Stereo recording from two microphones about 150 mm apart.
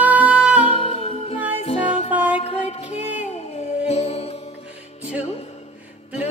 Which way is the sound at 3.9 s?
45° left (ahead or behind).